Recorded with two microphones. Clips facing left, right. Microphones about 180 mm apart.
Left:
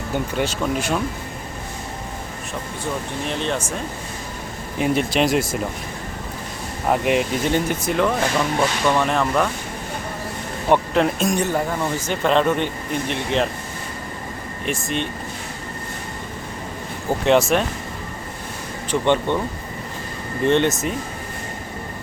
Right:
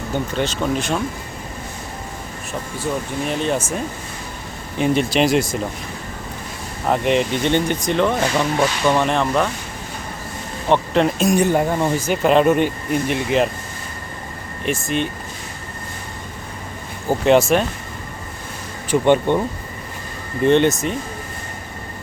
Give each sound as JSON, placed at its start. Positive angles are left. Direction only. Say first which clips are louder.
{"t": 0.3, "sound": "speech", "louder": "right 2 dB", "side_deg": 10}
{"t": 3.2, "sound": "speech", "louder": "right 3 dB", "side_deg": -5}
{"t": 4.8, "sound": "speech", "louder": "right 2 dB", "side_deg": 0}
{"t": 6.8, "sound": "speech", "louder": "right 1 dB", "side_deg": 5}
{"t": 10.7, "sound": "speech", "louder": "right 1 dB", "side_deg": 0}
{"t": 11.5, "sound": "speech", "louder": "right 4 dB", "side_deg": -20}
{"t": 12.0, "sound": "speech", "louder": "right 3 dB", "side_deg": -10}
{"t": 14.6, "sound": "speech", "louder": "right 3 dB", "side_deg": 0}
{"t": 17.1, "sound": "speech", "louder": "right 2 dB", "side_deg": 0}
{"t": 18.9, "sound": "speech", "louder": "right 4 dB", "side_deg": -10}
{"t": 20.4, "sound": "speech", "louder": "right 3 dB", "side_deg": 0}